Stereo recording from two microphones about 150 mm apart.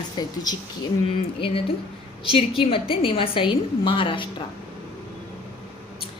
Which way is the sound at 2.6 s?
35° left (ahead or behind).